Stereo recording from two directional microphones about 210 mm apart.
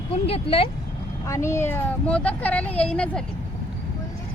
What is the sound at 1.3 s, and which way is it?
Speech, 10° left (ahead or behind).